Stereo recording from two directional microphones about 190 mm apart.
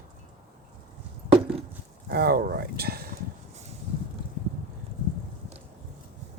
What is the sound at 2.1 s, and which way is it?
Speech, 55° right (ahead or behind).